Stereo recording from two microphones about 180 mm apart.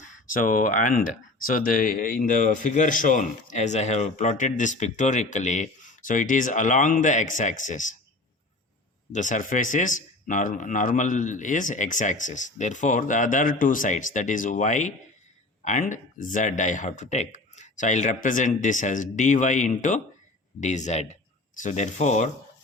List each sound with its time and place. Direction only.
0.3 s speech: 50° left (ahead or behind)
9.1 s speech: 45° left (ahead or behind)